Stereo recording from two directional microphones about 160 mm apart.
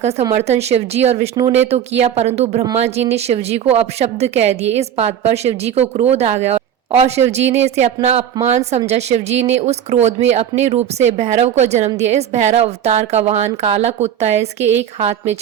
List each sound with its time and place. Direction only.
0.0 s a woman's voice: 40° right (ahead or behind)